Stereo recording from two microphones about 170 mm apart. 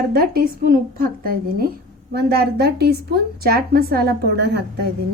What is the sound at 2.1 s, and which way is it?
A woman's voice, 70° right (ahead or behind).